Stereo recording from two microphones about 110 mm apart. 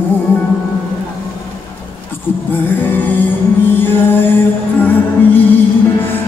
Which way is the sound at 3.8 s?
20° left (ahead or behind).